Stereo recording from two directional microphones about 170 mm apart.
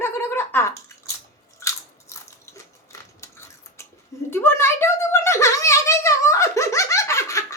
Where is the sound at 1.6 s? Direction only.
15° left (ahead or behind).